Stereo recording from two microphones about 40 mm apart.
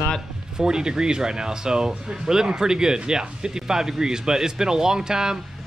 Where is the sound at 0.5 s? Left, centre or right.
Centre.